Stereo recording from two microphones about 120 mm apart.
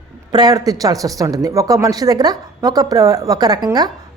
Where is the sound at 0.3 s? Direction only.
35° right (ahead or behind).